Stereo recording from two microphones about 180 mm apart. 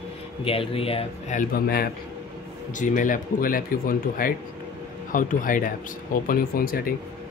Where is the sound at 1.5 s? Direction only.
60° left (ahead or behind).